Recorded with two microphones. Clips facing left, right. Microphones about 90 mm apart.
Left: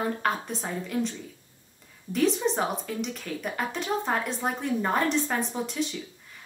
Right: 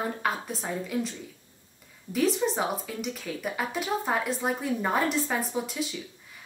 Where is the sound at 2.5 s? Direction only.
5° right (ahead or behind).